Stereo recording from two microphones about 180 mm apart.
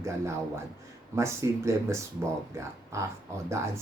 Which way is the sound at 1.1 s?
15° right (ahead or behind).